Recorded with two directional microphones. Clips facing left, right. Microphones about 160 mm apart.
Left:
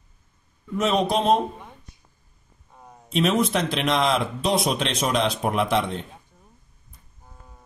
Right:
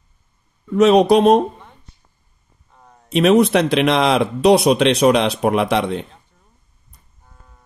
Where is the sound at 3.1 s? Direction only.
70° right (ahead or behind).